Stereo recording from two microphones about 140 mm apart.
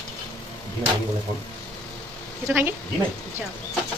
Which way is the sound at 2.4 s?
15° right (ahead or behind).